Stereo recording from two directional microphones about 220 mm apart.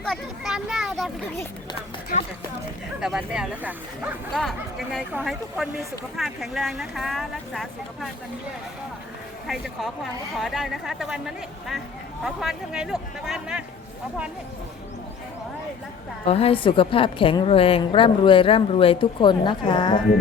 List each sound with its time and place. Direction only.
0.0 s speech: centre (ahead or behind)
3.0 s speech: 5° right (ahead or behind)
9.5 s speech: centre (ahead or behind)
16.2 s a woman's voice: 25° left (ahead or behind)